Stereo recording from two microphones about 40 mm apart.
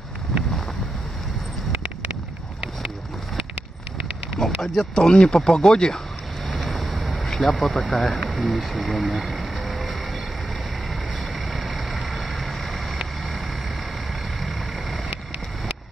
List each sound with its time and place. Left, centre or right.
4.4 s speech: centre
6.5 s a sound: centre
8.3 s speech: centre
11.5 s vehicle: centre